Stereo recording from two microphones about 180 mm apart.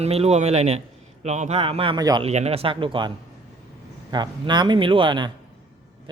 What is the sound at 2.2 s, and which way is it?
Speech, 35° right (ahead or behind).